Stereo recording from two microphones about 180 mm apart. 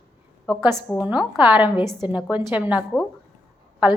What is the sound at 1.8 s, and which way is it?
Speech, 20° left (ahead or behind).